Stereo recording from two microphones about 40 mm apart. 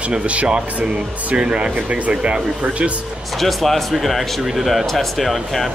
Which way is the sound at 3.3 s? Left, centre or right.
Centre.